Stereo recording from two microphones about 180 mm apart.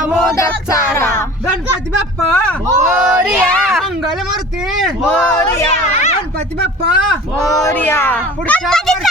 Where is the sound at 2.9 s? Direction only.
5° right (ahead or behind).